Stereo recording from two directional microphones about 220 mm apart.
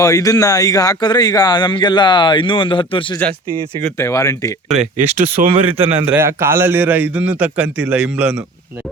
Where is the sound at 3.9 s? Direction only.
10° left (ahead or behind).